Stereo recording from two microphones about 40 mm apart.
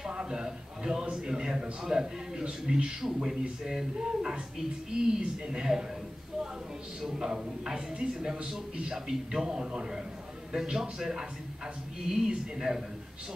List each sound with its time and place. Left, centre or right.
0.1 s a sound: right
1.0 s speech: centre
7.0 s speech: centre